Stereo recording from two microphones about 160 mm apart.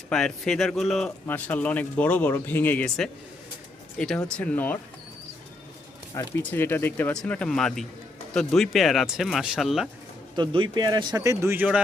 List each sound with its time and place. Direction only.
0.1 s speech: 5° left (ahead or behind)
6.4 s speech: 10° left (ahead or behind)
10.3 s speech: 30° right (ahead or behind); by 11.8 s 10° right (ahead or behind)